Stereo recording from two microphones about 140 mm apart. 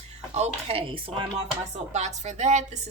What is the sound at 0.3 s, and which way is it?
Speech, 50° right (ahead or behind).